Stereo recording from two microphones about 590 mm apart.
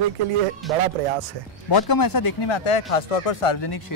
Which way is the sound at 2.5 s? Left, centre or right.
Left.